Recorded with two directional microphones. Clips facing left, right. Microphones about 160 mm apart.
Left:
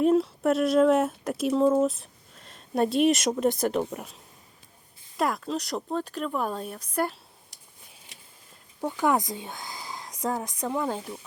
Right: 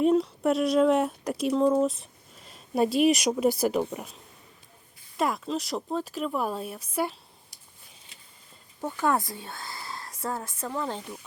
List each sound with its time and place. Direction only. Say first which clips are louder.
0.0 s speech: left 1 dB; centre (ahead or behind)
8.8 s speech: left 2 dB; 15° left (ahead or behind)